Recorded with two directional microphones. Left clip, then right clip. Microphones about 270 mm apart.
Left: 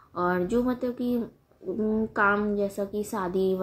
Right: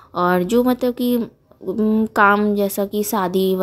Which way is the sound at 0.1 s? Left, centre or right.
Right.